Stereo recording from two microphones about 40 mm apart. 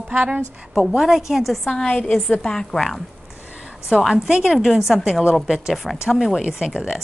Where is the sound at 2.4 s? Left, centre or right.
Centre.